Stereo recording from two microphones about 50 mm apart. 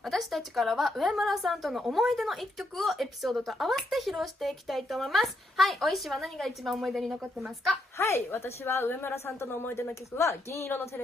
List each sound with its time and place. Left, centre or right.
0.0 s a woman's voice: centre
8.0 s a woman's voice: left
9.1 s a woman's voice: left